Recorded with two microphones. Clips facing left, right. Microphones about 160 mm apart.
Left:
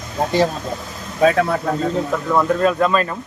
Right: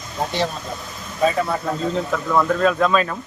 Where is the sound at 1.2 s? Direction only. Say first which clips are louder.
Left 4 dB; 70° left (ahead or behind).